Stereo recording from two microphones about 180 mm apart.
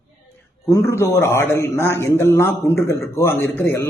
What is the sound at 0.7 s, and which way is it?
A man's voice, 15° left (ahead or behind).